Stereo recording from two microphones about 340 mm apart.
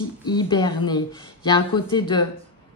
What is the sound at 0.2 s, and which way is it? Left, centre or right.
Speech, centre.